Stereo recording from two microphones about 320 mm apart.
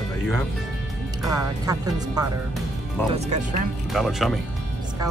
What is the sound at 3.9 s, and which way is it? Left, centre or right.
Speech, centre.